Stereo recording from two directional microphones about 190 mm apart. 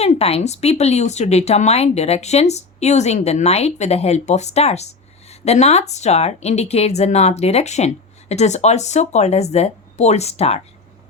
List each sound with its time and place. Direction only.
0.0 s speech: 35° left (ahead or behind)